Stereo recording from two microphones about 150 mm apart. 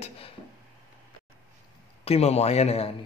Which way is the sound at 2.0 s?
45° left (ahead or behind).